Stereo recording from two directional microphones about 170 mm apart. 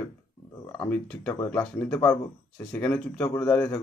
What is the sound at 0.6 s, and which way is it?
Speech, 20° left (ahead or behind).